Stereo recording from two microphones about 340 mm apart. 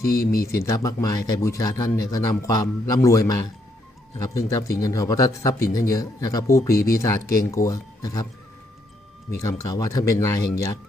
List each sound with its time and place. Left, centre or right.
0.1 s speech: left
0.6 s speech: centre
9.3 s speech: centre